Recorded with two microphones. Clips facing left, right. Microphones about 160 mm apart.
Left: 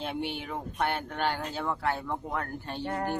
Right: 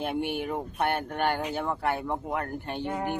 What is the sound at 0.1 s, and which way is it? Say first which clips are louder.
Speech: right 4 dB; 50° right (ahead or behind).